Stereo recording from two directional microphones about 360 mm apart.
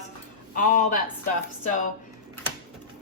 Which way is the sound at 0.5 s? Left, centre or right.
Left.